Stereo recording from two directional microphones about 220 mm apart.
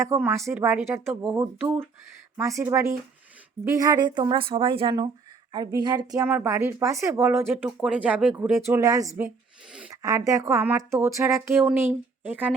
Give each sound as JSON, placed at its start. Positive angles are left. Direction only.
{"t": 0.0, "sound": "a woman's voice", "side_deg": -10}